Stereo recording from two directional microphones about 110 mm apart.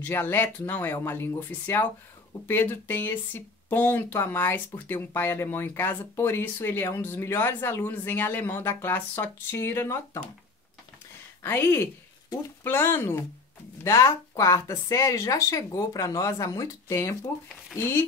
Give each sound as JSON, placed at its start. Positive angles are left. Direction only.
{"t": 0.0, "sound": "speech", "side_deg": 20}
{"t": 11.4, "sound": "speech", "side_deg": 20}